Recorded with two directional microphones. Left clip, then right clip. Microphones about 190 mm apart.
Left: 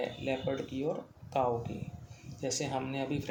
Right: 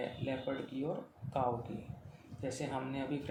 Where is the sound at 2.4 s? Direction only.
45° left (ahead or behind).